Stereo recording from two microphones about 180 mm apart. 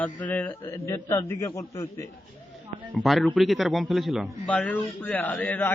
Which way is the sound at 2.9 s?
Centre (ahead or behind).